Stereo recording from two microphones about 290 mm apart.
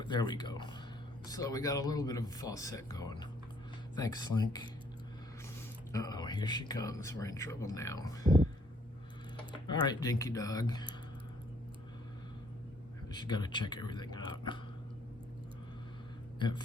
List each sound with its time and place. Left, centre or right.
0.0 s speech: centre
5.9 s speech: centre
9.8 s speech: centre
13.1 s speech: centre
16.4 s speech: centre